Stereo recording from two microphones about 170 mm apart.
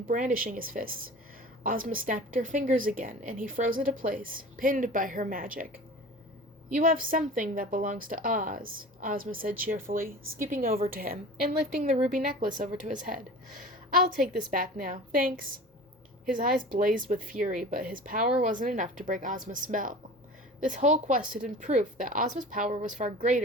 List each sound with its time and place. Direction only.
0.1 s a woman's voice: 50° right (ahead or behind)
14.2 s a woman's voice: 50° right (ahead or behind)